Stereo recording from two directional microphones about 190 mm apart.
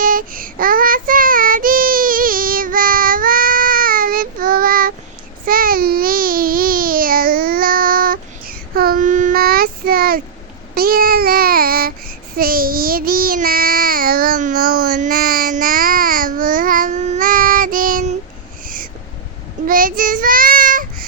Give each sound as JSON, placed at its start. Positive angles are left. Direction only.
{"t": 0.0, "sound": "child singing", "side_deg": -45}
{"t": 5.5, "sound": "babbling", "side_deg": -50}
{"t": 10.8, "sound": "child singing", "side_deg": -50}
{"t": 18.6, "sound": "owl", "side_deg": -45}
{"t": 19.6, "sound": "child singing", "side_deg": -45}